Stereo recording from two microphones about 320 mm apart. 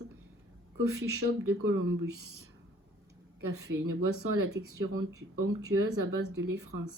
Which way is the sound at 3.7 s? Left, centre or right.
Right.